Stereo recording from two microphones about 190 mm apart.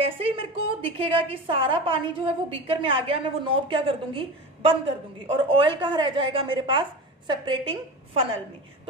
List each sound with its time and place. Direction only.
0.0 s a woman's voice: 30° right (ahead or behind)